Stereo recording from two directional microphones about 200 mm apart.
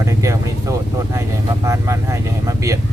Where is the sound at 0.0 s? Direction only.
15° right (ahead or behind).